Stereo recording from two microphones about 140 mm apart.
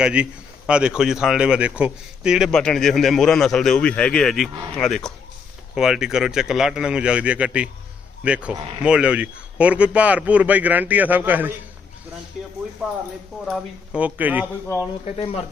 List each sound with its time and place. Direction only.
0.0 s a man's voice: 10° right (ahead or behind)
13.4 s a man's voice: 5° right (ahead or behind)
15.0 s speech: 45° left (ahead or behind)